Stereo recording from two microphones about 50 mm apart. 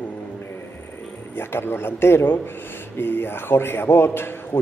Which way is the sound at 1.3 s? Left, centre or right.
Left.